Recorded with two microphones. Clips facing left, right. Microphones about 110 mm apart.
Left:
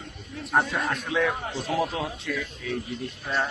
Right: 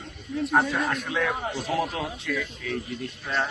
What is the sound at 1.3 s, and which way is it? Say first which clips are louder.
Speech: right 1 dB; 15° right (ahead or behind).